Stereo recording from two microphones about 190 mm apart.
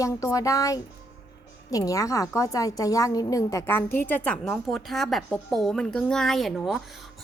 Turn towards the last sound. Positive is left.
turn(degrees=0)  # may be behind; listen again after turning